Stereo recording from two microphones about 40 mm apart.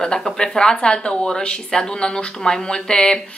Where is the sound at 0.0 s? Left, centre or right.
Centre.